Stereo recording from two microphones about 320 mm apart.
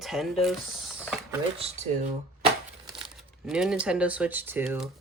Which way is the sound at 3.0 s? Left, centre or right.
Centre.